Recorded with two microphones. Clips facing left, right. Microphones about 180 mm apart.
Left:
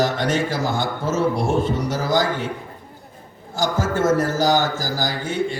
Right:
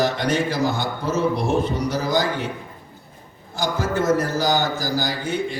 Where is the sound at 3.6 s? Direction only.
45° left (ahead or behind).